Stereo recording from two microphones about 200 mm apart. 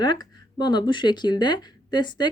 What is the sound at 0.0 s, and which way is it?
Speech, 20° left (ahead or behind).